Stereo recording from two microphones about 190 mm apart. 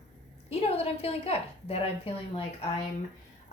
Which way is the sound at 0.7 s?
30° left (ahead or behind).